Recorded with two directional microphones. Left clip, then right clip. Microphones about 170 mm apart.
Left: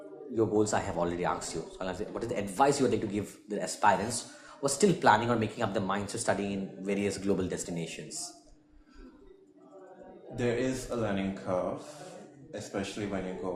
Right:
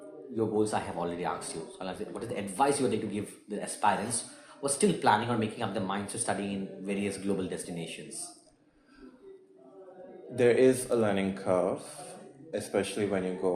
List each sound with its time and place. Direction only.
0.3 s speech: 35° left (ahead or behind)
10.3 s speech: 50° right (ahead or behind)